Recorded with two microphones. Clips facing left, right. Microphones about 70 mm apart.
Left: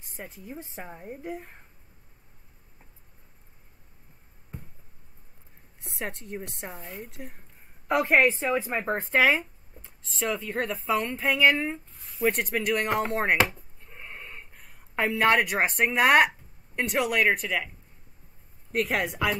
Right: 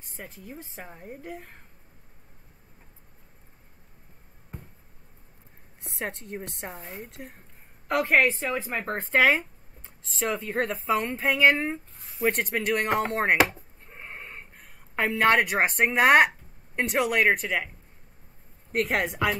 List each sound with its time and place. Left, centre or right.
0.5 s speech: centre
5.9 s a woman's voice: centre
13.8 s a sound: centre
14.5 s speech: centre
18.7 s a woman's voice: centre